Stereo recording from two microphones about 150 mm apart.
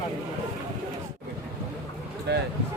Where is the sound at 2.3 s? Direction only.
90° right.